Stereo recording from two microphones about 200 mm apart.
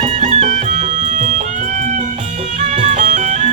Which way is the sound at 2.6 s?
35° right (ahead or behind).